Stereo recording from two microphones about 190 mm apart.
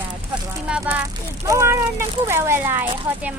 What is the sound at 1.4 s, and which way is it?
Speech, 15° right (ahead or behind).